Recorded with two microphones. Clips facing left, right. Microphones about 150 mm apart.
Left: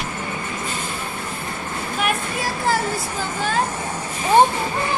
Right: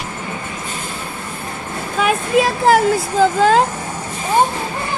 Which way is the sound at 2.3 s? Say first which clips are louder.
Right 13 dB; 90° right.